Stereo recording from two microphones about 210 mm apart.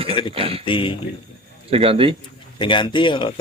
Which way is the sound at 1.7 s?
25° right (ahead or behind).